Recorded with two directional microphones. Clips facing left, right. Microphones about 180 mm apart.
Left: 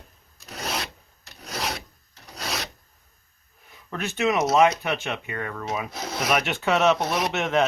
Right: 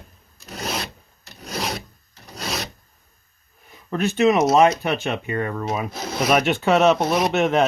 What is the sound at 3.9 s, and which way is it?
Speech, 30° right (ahead or behind).